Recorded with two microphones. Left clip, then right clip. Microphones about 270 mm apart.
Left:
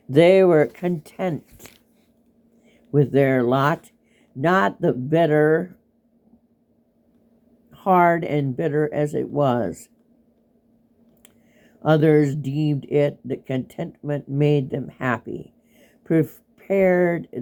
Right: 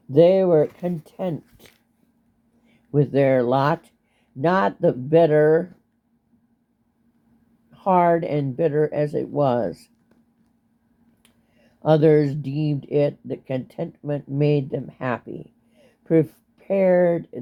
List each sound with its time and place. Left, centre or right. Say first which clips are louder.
0.2 s speech: left 1 dB; left
2.9 s speech: even; left
7.7 s speech: left 1 dB; left
11.8 s speech: right 1 dB; left